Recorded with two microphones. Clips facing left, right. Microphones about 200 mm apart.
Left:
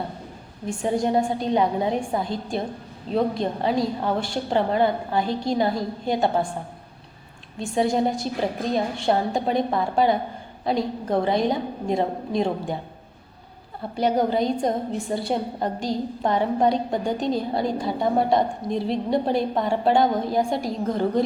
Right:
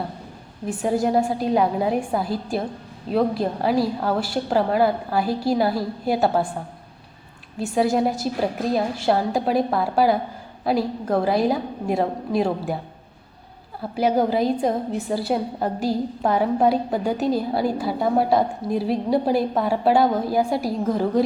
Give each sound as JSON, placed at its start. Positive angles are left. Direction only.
{"t": 0.7, "sound": "a woman's voice", "side_deg": -5}
{"t": 7.6, "sound": "a woman's voice", "side_deg": -5}
{"t": 13.9, "sound": "a woman's voice", "side_deg": -5}